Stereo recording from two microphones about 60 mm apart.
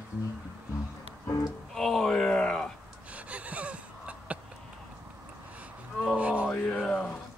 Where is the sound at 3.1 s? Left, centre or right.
Right.